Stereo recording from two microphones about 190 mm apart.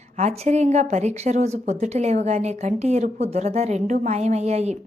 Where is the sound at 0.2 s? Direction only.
35° right (ahead or behind).